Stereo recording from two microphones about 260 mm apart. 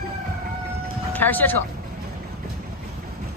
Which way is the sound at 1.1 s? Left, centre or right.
Centre.